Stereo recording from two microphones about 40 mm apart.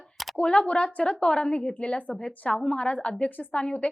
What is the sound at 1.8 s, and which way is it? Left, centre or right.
Speech, left.